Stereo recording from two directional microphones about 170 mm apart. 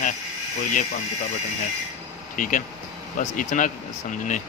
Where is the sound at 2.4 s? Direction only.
50° left (ahead or behind).